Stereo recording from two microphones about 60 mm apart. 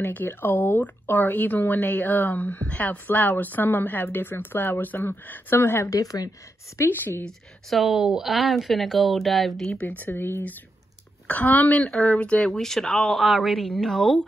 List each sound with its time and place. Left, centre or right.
0.0 s speech: left
5.9 s speech: left
6.9 s speech: left
7.7 s speech: centre
9.8 s a woman's voice: left
11.8 s speech: centre